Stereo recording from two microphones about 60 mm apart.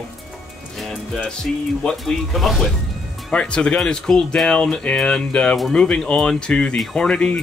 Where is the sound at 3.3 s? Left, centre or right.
Centre.